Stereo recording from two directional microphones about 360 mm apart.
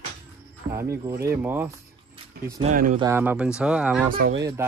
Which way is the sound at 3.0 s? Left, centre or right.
Centre.